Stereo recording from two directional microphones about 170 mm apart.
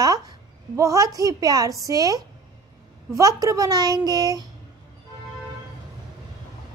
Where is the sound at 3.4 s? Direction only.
20° right (ahead or behind).